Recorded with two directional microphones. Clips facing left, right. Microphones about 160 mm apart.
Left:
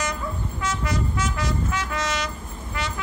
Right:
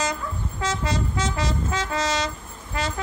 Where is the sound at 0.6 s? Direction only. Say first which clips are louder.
Right 2 dB; 30° right (ahead or behind).